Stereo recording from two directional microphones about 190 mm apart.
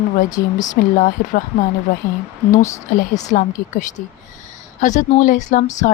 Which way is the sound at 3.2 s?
40° left (ahead or behind).